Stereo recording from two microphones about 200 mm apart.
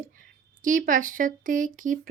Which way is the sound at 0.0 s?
40° right (ahead or behind).